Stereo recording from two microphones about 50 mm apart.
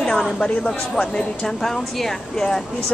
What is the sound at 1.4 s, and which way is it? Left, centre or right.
Speech, centre.